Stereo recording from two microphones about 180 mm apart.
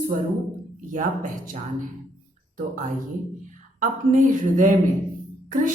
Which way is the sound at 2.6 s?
45° right (ahead or behind).